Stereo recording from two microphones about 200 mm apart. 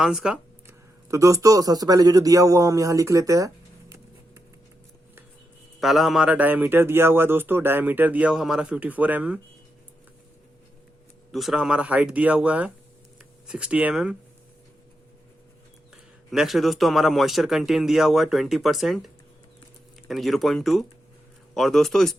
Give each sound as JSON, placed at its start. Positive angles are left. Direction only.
{"t": 0.0, "sound": "a sound", "side_deg": -5}
{"t": 1.0, "sound": "a man's voice", "side_deg": -15}
{"t": 5.8, "sound": "a man's voice", "side_deg": 0}
{"t": 11.3, "sound": "speech", "side_deg": 0}
{"t": 16.3, "sound": "speech", "side_deg": 0}